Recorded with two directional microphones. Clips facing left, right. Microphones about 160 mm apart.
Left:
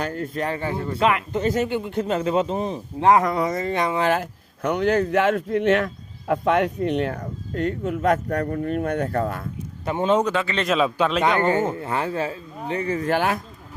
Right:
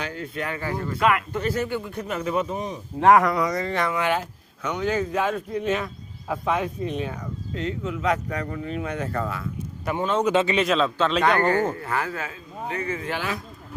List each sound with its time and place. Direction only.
0.0 s speech: 45° left (ahead or behind)
0.4 s speech: 30° left (ahead or behind)
3.0 s speech: 20° left (ahead or behind)
4.2 s speech: 60° left (ahead or behind)
7.2 s speech: 50° left (ahead or behind)
9.8 s speech: 25° left (ahead or behind)
10.3 s speech: 20° right (ahead or behind)
10.8 s a man's voice: 15° left (ahead or behind)
11.1 s a man's voice: centre (ahead or behind)
11.3 s speech: 20° left (ahead or behind); by 13.1 s 40° left (ahead or behind)
13.1 s speech: 55° left (ahead or behind)